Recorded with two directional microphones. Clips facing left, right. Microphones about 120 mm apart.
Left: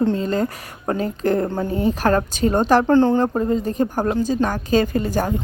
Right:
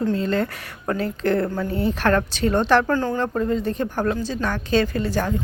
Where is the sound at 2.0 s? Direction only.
35° left (ahead or behind).